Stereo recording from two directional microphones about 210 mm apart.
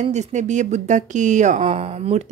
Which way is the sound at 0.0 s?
35° right (ahead or behind).